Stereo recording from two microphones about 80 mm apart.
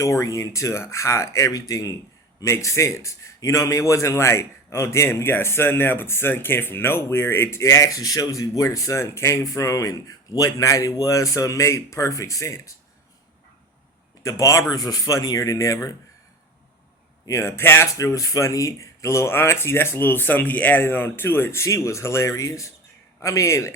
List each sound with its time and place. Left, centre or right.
0.0 s a man's voice: left
14.3 s speech: left
17.2 s a man's voice: left
17.9 s a man's voice: left